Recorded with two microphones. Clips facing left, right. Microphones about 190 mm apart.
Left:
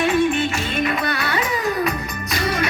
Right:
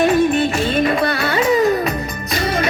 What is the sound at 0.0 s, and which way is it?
Music, 40° right (ahead or behind).